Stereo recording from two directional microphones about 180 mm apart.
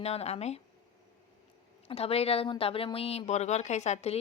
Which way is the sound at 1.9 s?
35° left (ahead or behind).